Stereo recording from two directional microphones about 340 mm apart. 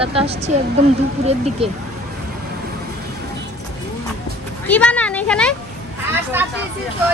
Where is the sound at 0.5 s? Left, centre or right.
Right.